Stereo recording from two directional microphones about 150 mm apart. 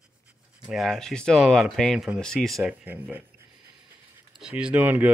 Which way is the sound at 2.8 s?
10° right (ahead or behind).